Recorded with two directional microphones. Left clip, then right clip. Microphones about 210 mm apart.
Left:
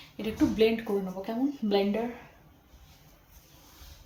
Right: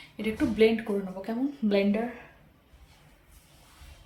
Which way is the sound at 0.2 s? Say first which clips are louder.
Right 1 dB; 15° right (ahead or behind).